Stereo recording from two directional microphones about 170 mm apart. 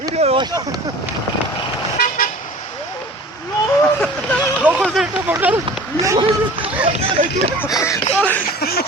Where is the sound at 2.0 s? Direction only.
55° left (ahead or behind).